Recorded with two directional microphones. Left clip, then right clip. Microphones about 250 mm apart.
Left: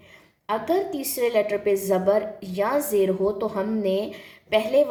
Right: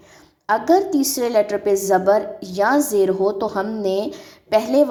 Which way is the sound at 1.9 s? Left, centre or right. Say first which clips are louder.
Right 5 dB; right.